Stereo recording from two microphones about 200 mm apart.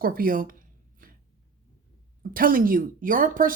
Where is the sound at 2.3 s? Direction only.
45° right (ahead or behind).